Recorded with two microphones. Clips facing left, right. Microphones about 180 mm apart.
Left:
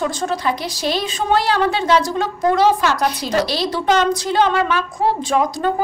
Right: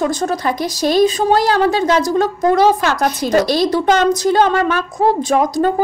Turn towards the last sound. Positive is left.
turn(degrees=-45)  # may be behind; listen again after turning